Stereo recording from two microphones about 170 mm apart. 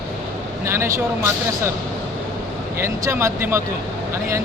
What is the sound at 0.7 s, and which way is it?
Speech, 15° right (ahead or behind).